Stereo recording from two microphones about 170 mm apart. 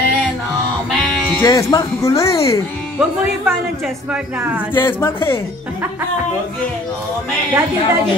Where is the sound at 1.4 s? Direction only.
20° left (ahead or behind).